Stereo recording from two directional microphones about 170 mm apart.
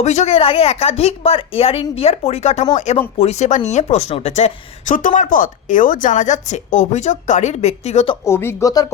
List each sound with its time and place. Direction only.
0.0 s a woman's voice: 40° left (ahead or behind)
8.2 s speech: 15° left (ahead or behind)